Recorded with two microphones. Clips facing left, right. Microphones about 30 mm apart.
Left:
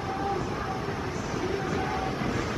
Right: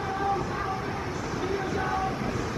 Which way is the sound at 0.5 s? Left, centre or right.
Centre.